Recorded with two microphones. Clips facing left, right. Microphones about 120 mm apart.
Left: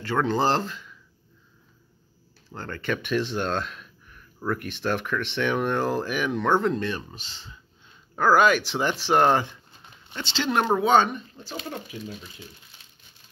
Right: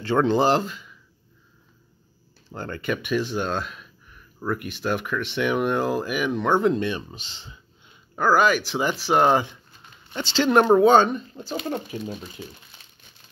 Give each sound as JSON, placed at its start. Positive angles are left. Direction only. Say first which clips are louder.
{"t": 0.0, "sound": "speech", "louder": "right 4 dB", "side_deg": -25}
{"t": 2.5, "sound": "speech", "louder": "right 2 dB", "side_deg": -15}
{"t": 8.2, "sound": "speech", "louder": "even", "side_deg": 0}
{"t": 10.2, "sound": "speech", "louder": "right 6 dB", "side_deg": -45}
{"t": 11.7, "sound": "speech", "louder": "right 6 dB", "side_deg": -45}